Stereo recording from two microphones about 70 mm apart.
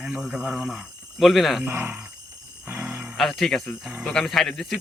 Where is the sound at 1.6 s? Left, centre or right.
Right.